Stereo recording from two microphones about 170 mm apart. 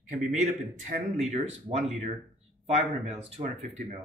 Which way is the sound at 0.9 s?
40° right (ahead or behind).